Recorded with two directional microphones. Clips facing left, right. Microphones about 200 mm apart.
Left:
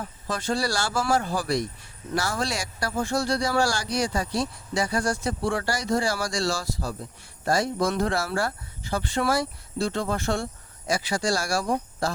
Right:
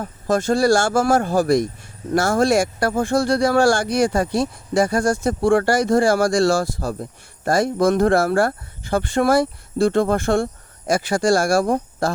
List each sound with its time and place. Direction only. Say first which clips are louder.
0.0 s speech: right 10 dB; 45° right (ahead or behind)